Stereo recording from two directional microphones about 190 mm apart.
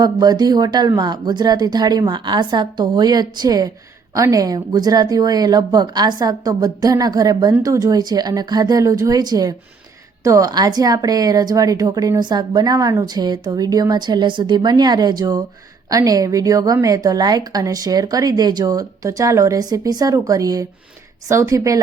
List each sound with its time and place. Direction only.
0.0 s speech: 20° right (ahead or behind)